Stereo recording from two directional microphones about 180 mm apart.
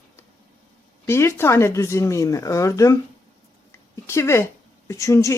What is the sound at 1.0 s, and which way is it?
Speech, 15° left (ahead or behind).